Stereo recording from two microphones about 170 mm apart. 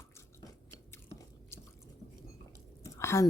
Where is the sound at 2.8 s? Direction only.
15° left (ahead or behind).